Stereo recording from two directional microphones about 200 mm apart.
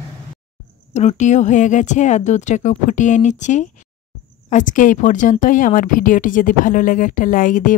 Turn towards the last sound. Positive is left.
turn(degrees=40)  # may be behind; listen again after turning